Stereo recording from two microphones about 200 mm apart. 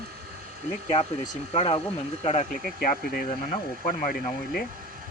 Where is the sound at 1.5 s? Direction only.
30° left (ahead or behind).